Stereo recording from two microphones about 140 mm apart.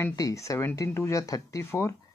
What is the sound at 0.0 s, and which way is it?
Speech, 25° left (ahead or behind).